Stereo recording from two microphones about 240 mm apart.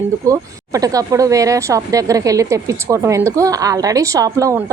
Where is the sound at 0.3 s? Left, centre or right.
Centre.